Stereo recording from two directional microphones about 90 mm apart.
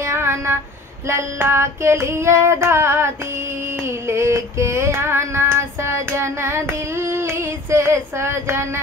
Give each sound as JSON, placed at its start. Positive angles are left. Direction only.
{"t": 0.0, "sound": "child singing", "side_deg": -30}
{"t": 3.8, "sound": "female singing", "side_deg": -30}